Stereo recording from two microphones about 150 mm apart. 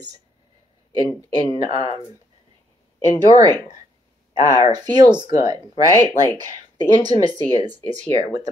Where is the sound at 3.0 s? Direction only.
45° left (ahead or behind).